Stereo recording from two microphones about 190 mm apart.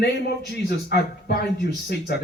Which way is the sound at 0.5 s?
55° left (ahead or behind).